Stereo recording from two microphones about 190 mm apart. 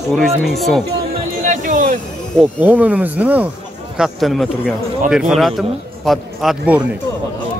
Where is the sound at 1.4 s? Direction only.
45° right (ahead or behind).